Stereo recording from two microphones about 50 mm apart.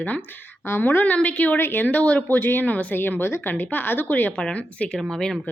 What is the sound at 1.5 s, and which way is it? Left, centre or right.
Speech, left.